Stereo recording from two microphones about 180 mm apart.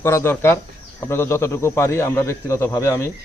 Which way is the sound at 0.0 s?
15° left (ahead or behind).